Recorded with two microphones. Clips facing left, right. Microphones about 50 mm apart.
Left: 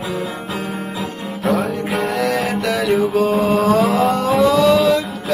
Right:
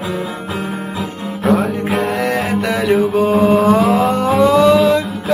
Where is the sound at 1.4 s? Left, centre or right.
Centre.